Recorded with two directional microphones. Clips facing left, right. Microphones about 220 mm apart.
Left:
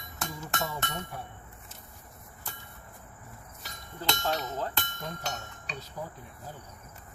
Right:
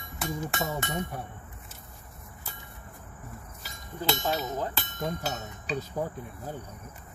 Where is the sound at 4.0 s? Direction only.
10° right (ahead or behind).